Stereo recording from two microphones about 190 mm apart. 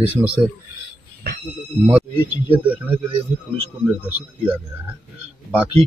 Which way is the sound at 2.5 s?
10° right (ahead or behind).